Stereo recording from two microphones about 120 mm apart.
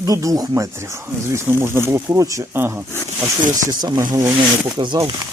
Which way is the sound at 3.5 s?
30° right (ahead or behind).